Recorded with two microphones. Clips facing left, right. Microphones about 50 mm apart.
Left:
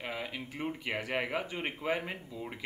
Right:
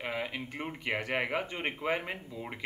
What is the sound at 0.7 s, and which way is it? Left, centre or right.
Speech, centre.